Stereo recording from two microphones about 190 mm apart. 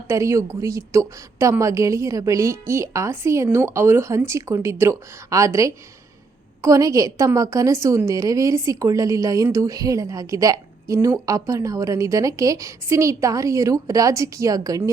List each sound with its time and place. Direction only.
0.1 s a woman's voice: 15° right (ahead or behind)